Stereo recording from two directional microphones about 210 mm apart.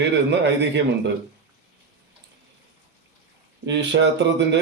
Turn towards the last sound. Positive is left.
turn(degrees=-55)  # may be behind; listen again after turning